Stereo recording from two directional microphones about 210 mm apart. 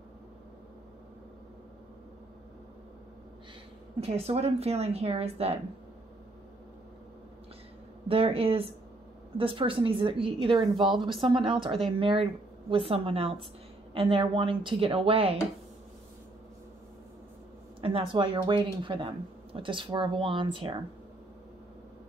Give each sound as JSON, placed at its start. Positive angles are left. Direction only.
{"t": 4.0, "sound": "a woman's voice", "side_deg": -30}
{"t": 8.1, "sound": "a woman's voice", "side_deg": -25}
{"t": 17.7, "sound": "a woman's voice", "side_deg": -25}